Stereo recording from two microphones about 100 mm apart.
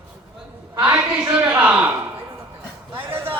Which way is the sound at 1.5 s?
15° right (ahead or behind).